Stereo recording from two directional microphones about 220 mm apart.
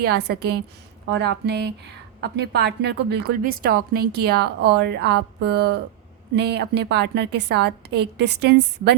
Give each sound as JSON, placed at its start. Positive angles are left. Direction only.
{"t": 0.0, "sound": "a woman's voice", "side_deg": -50}